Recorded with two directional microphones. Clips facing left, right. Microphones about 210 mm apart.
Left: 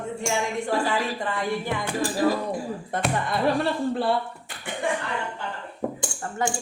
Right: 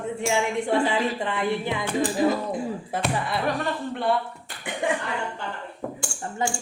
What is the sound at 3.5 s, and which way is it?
Speech, 30° left (ahead or behind).